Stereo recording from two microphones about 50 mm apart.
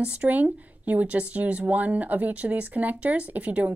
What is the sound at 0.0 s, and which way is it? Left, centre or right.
Speech, right.